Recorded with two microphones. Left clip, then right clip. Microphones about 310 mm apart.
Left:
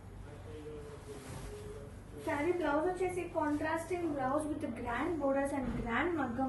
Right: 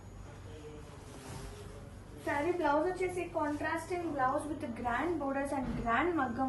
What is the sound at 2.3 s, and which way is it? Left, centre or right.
A woman's voice, centre.